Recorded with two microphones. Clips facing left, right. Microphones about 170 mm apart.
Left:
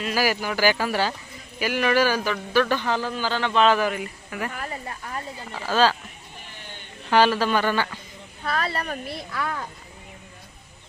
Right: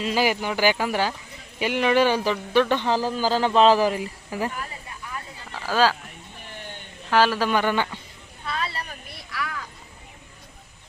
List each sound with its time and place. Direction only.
0.0 s a man's voice: 25° right (ahead or behind)
4.5 s a sound: 50° left (ahead or behind)
5.6 s speech: 10° right (ahead or behind)
7.1 s speech: centre (ahead or behind)
8.4 s speech: 55° left (ahead or behind)